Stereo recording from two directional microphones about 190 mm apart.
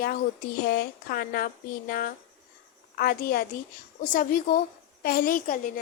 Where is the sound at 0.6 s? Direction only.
55° left (ahead or behind).